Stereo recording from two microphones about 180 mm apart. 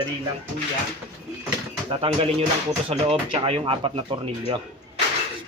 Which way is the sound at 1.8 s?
30° right (ahead or behind).